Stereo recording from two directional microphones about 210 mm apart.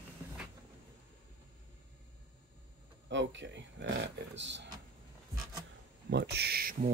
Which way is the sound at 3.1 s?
60° right (ahead or behind).